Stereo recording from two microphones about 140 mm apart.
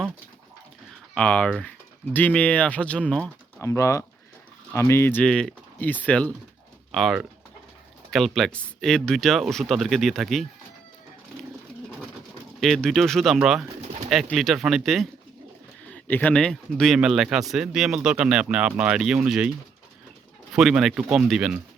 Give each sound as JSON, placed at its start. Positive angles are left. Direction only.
{"t": 1.1, "sound": "speech", "side_deg": 10}
{"t": 3.6, "sound": "speech", "side_deg": 20}
{"t": 6.9, "sound": "speech", "side_deg": 0}
{"t": 12.5, "sound": "speech", "side_deg": 0}
{"t": 15.9, "sound": "speech", "side_deg": 10}
{"t": 20.5, "sound": "speech", "side_deg": -5}